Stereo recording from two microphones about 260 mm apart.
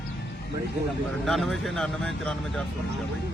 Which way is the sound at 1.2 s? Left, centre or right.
Centre.